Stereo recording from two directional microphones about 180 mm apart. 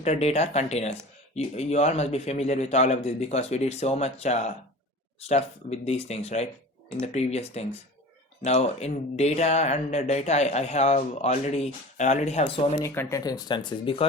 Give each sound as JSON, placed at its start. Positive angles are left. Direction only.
{"t": 0.0, "sound": "speech", "side_deg": 35}
{"t": 12.8, "sound": "speech", "side_deg": 15}